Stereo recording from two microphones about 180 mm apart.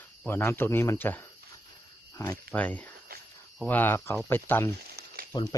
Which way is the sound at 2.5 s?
10° left (ahead or behind).